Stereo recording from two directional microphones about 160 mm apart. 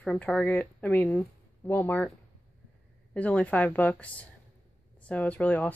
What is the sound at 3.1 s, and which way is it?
Speech, 10° left (ahead or behind).